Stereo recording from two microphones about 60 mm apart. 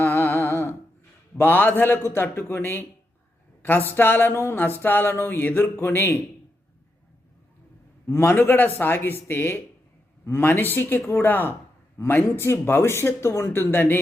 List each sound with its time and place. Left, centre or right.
0.0 s music: left
1.4 s speech: left
8.0 s speech: left